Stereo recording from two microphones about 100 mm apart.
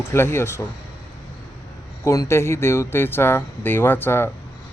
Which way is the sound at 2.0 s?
30° left (ahead or behind).